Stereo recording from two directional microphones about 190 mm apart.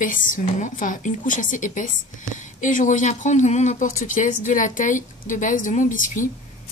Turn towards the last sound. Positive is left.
turn(degrees=45)  # may be behind; listen again after turning